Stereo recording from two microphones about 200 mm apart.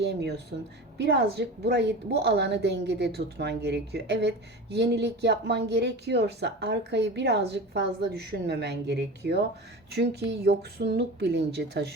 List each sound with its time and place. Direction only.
0.0 s a woman's voice: 55° right (ahead or behind)